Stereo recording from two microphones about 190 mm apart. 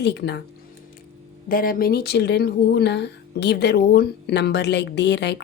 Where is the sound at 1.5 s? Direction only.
50° left (ahead or behind).